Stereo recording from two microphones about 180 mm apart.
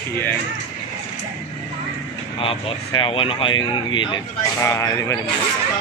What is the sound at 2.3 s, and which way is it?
Speech, 30° left (ahead or behind).